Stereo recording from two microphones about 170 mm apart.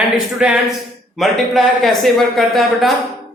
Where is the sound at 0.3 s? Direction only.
5° right (ahead or behind).